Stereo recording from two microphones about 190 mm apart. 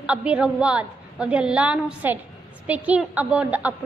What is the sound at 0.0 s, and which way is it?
A woman's voice, 5° right (ahead or behind).